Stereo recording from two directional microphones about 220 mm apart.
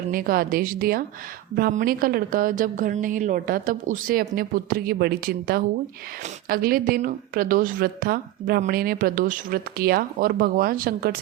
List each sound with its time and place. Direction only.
0.1 s a woman's voice: 40° right (ahead or behind)